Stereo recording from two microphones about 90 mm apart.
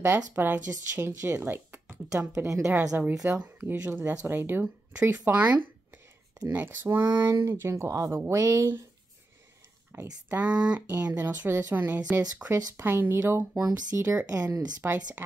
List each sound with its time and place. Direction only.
0.0 s speech: 25° right (ahead or behind)
3.3 s speech: 20° right (ahead or behind)
9.9 s speech: 30° right (ahead or behind)
10.3 s speech: 10° right (ahead or behind)
12.4 s speech: 40° right (ahead or behind)
12.7 s speech: 25° right (ahead or behind)
13.6 s speech: 45° right (ahead or behind)
13.9 s speech: 30° right (ahead or behind)